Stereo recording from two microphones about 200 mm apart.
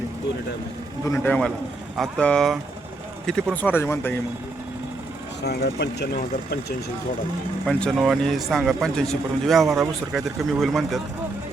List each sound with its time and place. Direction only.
1.0 s speech: 10° left (ahead or behind)
5.4 s speech: 55° left (ahead or behind)
7.6 s speech: 5° left (ahead or behind)